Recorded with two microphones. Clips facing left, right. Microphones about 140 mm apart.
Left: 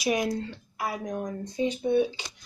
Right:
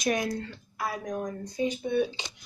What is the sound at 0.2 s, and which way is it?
Speech, 15° left (ahead or behind).